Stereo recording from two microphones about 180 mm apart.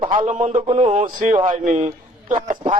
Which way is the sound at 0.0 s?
25° right (ahead or behind).